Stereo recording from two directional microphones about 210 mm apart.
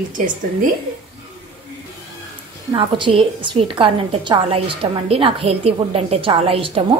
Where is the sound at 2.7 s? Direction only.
25° right (ahead or behind).